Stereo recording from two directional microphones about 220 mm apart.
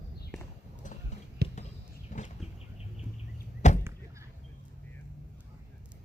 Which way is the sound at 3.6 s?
30° left (ahead or behind).